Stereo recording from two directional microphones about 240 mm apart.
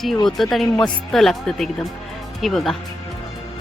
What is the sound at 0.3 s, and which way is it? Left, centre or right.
Speech, centre.